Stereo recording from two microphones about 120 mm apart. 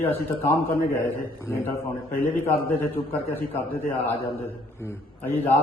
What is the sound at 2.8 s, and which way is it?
Speech, 15° left (ahead or behind).